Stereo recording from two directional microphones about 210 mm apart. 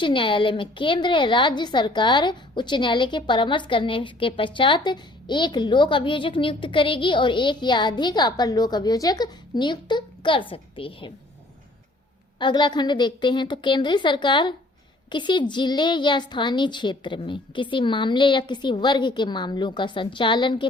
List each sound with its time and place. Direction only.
0.0 s a woman's voice: 25° left (ahead or behind)
12.4 s a woman's voice: 20° left (ahead or behind)